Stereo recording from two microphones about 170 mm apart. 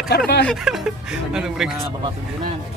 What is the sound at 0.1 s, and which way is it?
Speech, 75° left (ahead or behind).